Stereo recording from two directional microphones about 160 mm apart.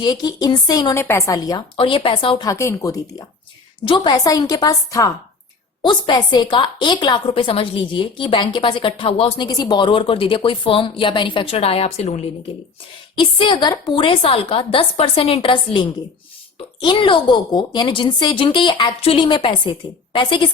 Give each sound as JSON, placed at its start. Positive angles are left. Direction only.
{"t": 0.0, "sound": "a woman's voice", "side_deg": 25}
{"t": 2.5, "sound": "a woman's voice", "side_deg": 20}
{"t": 9.5, "sound": "a woman's voice", "side_deg": 25}
{"t": 13.1, "sound": "a woman's voice", "side_deg": 30}